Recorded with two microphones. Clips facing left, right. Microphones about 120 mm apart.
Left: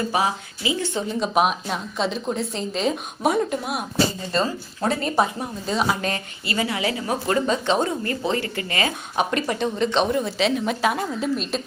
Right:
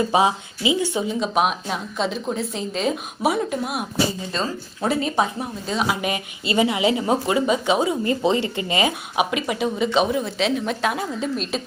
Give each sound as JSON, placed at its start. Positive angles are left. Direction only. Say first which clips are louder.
{"t": 0.1, "sound": "speech", "louder": "right 4 dB", "side_deg": -20}
{"t": 1.2, "sound": "a woman's voice", "louder": "left 3 dB", "side_deg": 0}
{"t": 7.3, "sound": "speech", "louder": "right 1 dB", "side_deg": -10}
{"t": 8.0, "sound": "speech", "louder": "right 4 dB", "side_deg": -20}
{"t": 9.3, "sound": "a woman's voice", "louder": "even", "side_deg": -5}